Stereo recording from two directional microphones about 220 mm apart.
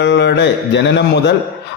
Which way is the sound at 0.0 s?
55° left (ahead or behind).